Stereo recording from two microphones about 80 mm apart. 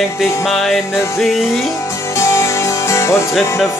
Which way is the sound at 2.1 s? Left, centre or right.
Left.